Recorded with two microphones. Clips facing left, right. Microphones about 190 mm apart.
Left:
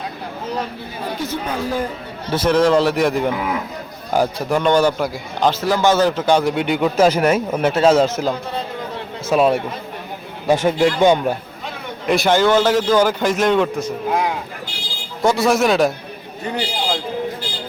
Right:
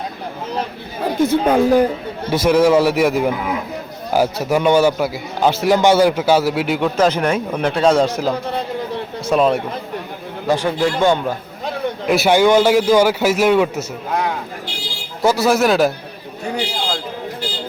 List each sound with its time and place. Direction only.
1.2 s speech: 50° right (ahead or behind)
2.3 s a man's voice: 10° right (ahead or behind)
9.3 s a man's voice: 5° left (ahead or behind)
10.4 s speech: 20° left (ahead or behind)
12.0 s a man's voice: 5° right (ahead or behind)
15.2 s a man's voice: centre (ahead or behind)